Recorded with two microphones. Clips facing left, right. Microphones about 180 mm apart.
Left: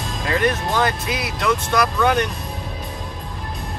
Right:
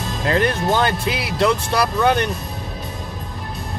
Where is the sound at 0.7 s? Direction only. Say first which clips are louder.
Right 2 dB; 25° right (ahead or behind).